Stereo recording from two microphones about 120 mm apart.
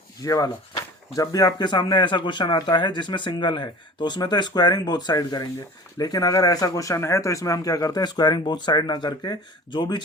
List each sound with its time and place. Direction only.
0.2 s speech: 30° left (ahead or behind)